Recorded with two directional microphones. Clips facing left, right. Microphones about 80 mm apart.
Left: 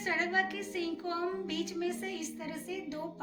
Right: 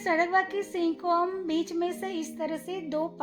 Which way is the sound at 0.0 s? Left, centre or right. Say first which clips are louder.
Right 7 dB; right.